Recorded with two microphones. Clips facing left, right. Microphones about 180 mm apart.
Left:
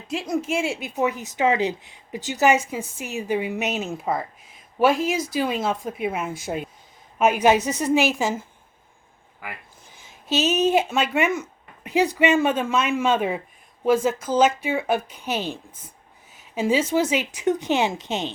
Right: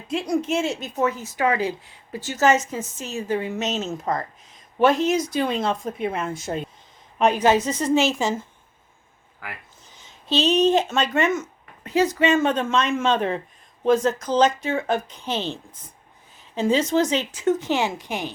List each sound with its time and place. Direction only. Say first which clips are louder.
0.1 s a woman's voice: right 2 dB; centre (ahead or behind)
16.6 s a woman's voice: right 1 dB; 10° left (ahead or behind)